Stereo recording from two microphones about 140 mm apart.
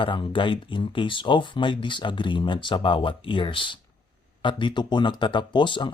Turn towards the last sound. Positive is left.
turn(degrees=35)  # may be behind; listen again after turning